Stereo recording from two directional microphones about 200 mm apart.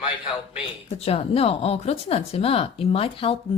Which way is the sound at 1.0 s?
30° left (ahead or behind).